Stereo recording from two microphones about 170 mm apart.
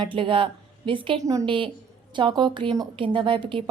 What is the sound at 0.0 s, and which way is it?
A woman's voice, 30° right (ahead or behind).